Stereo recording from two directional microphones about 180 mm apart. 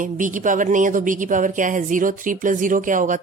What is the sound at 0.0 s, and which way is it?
Speech, 45° right (ahead or behind).